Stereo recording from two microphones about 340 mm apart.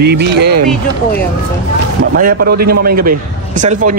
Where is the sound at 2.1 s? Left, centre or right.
Right.